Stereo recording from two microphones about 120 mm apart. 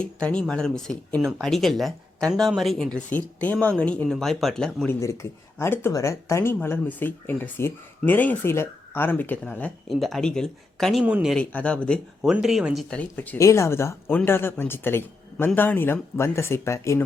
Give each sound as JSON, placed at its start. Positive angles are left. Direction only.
{"t": 0.0, "sound": "speech", "side_deg": 10}
{"t": 4.9, "sound": "speech", "side_deg": 25}
{"t": 9.9, "sound": "speech", "side_deg": 0}
{"t": 11.0, "sound": "speech", "side_deg": -5}
{"t": 11.3, "sound": "speech", "side_deg": 10}
{"t": 12.2, "sound": "speech", "side_deg": -5}
{"t": 13.0, "sound": "speech", "side_deg": 15}